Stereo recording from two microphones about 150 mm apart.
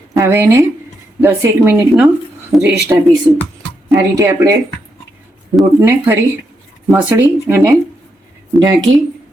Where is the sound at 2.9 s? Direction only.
20° right (ahead or behind).